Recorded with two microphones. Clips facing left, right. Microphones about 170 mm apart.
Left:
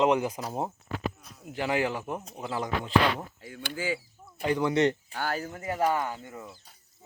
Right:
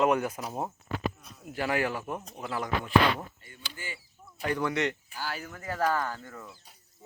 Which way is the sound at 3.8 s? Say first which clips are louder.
Left 12 dB; 90° left.